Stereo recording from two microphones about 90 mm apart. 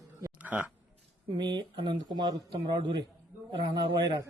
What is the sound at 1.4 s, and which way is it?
A man's voice, 55° right (ahead or behind).